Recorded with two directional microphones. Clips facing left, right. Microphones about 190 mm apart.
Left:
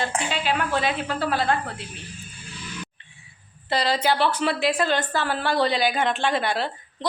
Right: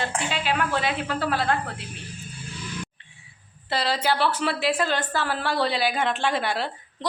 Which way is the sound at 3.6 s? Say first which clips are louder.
Left 2 dB; 5° right (ahead or behind).